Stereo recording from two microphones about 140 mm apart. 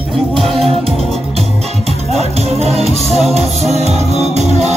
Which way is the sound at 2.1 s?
50° right (ahead or behind).